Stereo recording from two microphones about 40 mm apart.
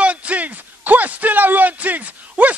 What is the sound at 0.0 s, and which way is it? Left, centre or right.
A man's voice, right.